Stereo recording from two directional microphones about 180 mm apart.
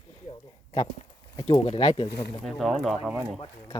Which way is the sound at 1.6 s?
35° left (ahead or behind).